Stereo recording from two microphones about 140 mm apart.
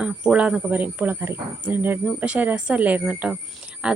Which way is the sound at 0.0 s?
10° right (ahead or behind).